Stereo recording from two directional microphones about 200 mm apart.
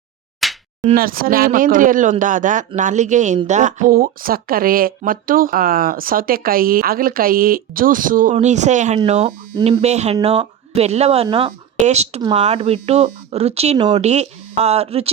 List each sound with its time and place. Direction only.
0.4 s slap: centre (ahead or behind)
0.9 s a man's voice: 45° right (ahead or behind); by 15.1 s 30° right (ahead or behind)